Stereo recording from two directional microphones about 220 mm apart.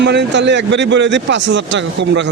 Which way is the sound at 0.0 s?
50° right (ahead or behind).